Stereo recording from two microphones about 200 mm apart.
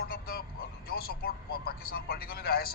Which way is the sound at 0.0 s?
50° left (ahead or behind).